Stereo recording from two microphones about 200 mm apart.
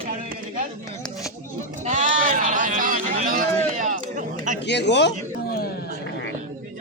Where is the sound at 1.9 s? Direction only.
40° right (ahead or behind).